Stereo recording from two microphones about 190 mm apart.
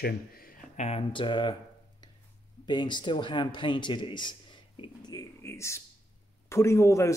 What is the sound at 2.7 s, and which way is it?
A man's voice, 25° left (ahead or behind).